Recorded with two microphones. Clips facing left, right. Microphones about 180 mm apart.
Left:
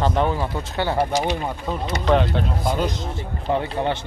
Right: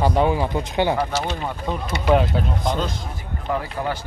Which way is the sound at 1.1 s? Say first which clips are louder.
Left 3 dB; 15° left (ahead or behind).